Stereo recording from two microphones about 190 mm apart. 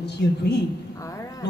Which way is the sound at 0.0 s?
60° left (ahead or behind).